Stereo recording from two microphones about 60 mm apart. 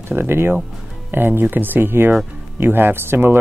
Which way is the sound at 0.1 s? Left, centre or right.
Right.